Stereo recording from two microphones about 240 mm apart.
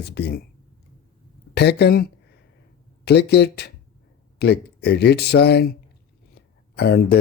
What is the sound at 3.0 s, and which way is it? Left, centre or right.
Speech, left.